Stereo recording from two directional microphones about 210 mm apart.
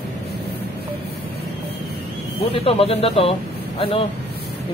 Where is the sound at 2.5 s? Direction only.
25° left (ahead or behind).